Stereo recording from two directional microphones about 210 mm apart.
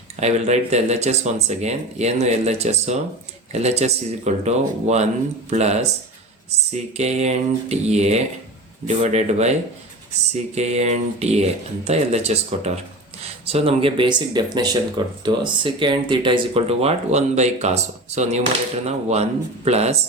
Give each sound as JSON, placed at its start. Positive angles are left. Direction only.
{"t": 0.2, "sound": "speech", "side_deg": -30}